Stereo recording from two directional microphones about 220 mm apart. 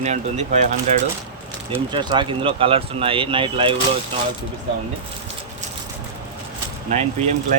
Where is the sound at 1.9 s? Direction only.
20° right (ahead or behind).